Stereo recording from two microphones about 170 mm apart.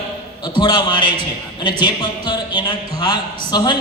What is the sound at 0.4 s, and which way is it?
A man's voice, 25° left (ahead or behind).